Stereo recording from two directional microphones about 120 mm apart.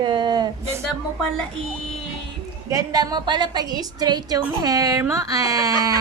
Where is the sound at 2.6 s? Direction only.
30° right (ahead or behind).